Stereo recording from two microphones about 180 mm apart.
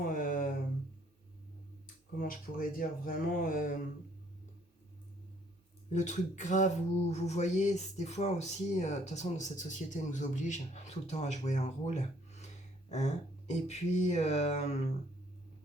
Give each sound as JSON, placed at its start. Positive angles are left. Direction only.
{"t": 0.1, "sound": "a sound", "side_deg": 50}
{"t": 2.1, "sound": "speech", "side_deg": 50}
{"t": 5.9, "sound": "speech", "side_deg": 40}